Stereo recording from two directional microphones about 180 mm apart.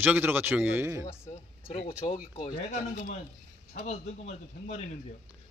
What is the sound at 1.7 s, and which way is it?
Speech, 30° left (ahead or behind).